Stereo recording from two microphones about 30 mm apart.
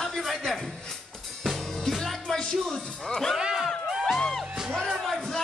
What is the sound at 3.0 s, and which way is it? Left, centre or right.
Speech, centre.